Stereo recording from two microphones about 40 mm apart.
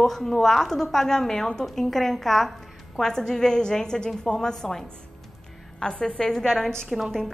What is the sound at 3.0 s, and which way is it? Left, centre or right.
A woman's voice, centre.